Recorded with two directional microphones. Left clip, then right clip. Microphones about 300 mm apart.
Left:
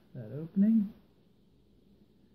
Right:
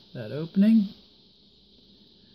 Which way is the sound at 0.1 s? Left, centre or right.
Right.